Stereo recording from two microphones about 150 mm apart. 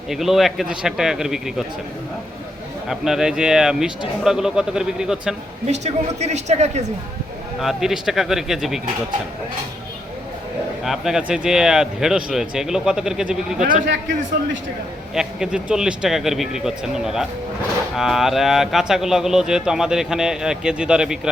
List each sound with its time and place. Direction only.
0.1 s speech: centre (ahead or behind)
2.9 s speech: 5° right (ahead or behind)
5.7 s a woman's voice: 50° right (ahead or behind)
7.6 s speech: centre (ahead or behind)
10.8 s speech: centre (ahead or behind)
15.1 s speech: 5° right (ahead or behind)